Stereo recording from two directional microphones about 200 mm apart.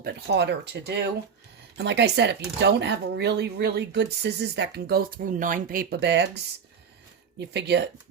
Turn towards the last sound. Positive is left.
turn(degrees=-55)  # may be behind; listen again after turning